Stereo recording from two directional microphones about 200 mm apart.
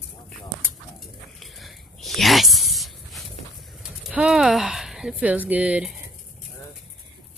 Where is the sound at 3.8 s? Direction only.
5° right (ahead or behind).